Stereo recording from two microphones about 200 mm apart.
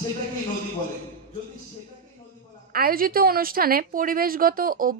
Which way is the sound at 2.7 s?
45° right (ahead or behind).